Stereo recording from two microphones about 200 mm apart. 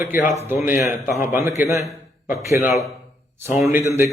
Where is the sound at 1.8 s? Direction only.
Centre (ahead or behind).